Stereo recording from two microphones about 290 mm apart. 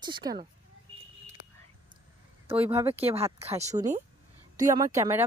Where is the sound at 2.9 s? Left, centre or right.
Centre.